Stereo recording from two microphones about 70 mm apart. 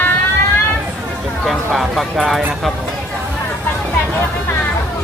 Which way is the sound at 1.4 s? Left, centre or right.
Centre.